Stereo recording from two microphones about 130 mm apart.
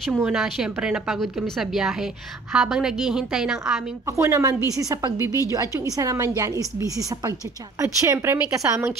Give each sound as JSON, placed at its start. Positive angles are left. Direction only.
{"t": 0.3, "sound": "speech", "side_deg": -5}
{"t": 4.2, "sound": "a woman's voice", "side_deg": -20}